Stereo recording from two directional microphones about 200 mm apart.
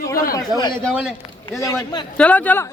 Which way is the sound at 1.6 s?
20° left (ahead or behind).